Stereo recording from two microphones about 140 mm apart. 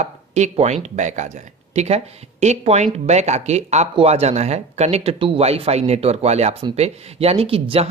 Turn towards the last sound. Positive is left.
turn(degrees=-45)  # may be behind; listen again after turning